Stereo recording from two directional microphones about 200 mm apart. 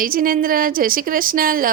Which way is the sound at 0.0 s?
45° right (ahead or behind).